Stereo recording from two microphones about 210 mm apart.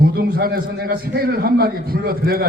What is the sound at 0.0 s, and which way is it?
A man's voice, 45° right (ahead or behind).